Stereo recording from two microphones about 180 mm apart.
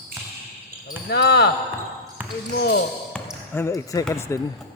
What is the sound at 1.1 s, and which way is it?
Speech, 65° left (ahead or behind).